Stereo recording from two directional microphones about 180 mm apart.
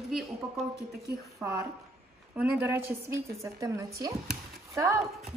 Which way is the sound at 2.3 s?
10° right (ahead or behind).